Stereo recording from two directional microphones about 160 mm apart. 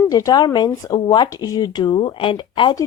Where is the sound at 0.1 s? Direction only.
25° left (ahead or behind).